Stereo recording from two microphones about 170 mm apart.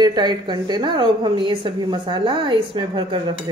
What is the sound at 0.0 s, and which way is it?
A woman's voice, 25° right (ahead or behind).